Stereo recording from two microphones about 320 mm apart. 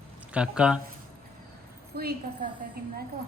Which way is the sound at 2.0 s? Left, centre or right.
Right.